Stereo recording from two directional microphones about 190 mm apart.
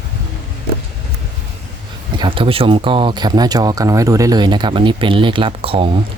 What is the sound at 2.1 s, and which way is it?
Speech, 25° right (ahead or behind).